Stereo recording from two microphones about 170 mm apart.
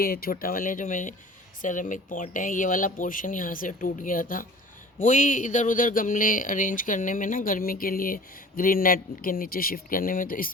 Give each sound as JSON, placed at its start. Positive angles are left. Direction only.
{"t": 0.0, "sound": "speech", "side_deg": 60}